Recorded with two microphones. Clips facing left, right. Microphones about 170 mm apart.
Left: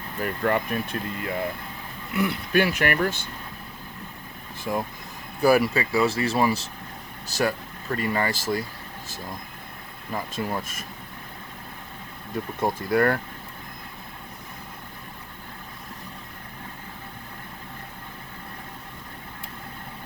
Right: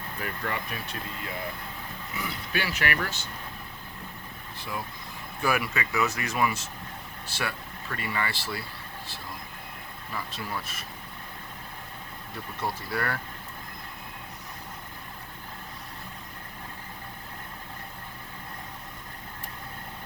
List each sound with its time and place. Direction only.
0.2 s speech: 50° left (ahead or behind)
4.6 s speech: 45° left (ahead or behind)
10.1 s speech: 45° left (ahead or behind)
12.5 s speech: 50° left (ahead or behind)